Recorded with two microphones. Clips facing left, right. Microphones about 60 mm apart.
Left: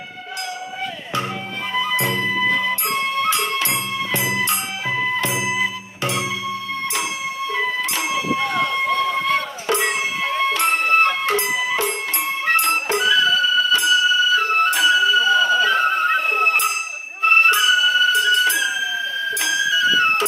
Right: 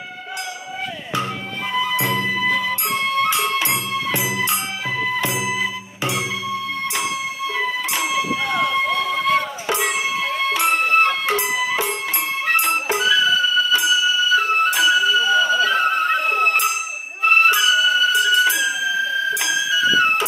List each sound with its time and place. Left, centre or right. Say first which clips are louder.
1.7 s music: even; centre
3.5 s music: right 1 dB; centre
4.9 s music: left 1 dB; centre
5.3 s music: left 1 dB; centre
8.1 s a sound: left 1 dB; centre
10.5 s music: right 2 dB; centre
11.3 s music: even; centre
17.5 s music: even; centre